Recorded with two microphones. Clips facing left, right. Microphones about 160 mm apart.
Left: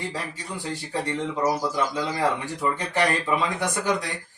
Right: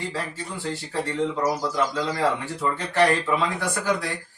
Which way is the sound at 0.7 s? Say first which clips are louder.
Even; 15° left (ahead or behind).